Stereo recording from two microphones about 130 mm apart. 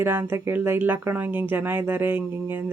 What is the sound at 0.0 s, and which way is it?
Speech, 15° right (ahead or behind).